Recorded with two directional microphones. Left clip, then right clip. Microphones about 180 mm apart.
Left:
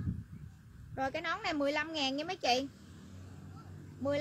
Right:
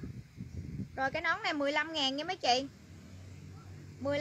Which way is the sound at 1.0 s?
15° left (ahead or behind).